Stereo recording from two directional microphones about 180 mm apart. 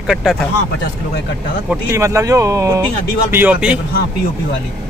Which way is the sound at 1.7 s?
15° right (ahead or behind).